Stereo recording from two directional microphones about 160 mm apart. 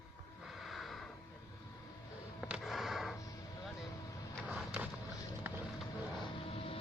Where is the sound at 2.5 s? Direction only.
Centre (ahead or behind).